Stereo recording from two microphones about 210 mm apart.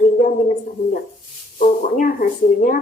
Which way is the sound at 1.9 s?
40° left (ahead or behind).